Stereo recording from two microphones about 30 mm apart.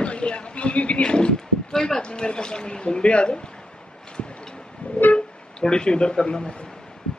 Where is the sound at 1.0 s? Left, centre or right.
Left.